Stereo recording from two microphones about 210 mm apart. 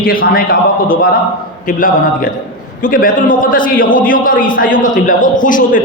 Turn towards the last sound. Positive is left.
turn(degrees=40)  # may be behind; listen again after turning